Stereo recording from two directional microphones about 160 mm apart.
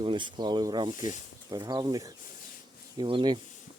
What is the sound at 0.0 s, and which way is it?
Speech, 30° right (ahead or behind).